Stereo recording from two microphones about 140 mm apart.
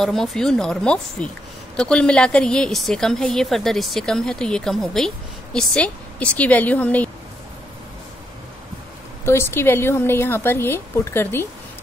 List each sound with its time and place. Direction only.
0.0 s a woman's voice: centre (ahead or behind)
9.2 s speech: 15° left (ahead or behind)